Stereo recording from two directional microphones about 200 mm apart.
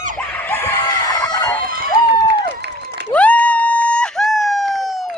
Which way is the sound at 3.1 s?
5° left (ahead or behind).